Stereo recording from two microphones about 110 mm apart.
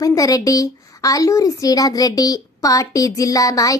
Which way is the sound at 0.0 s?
30° left (ahead or behind).